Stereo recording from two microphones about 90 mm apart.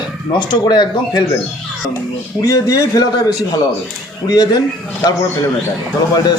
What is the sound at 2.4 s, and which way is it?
Speech, 40° left (ahead or behind).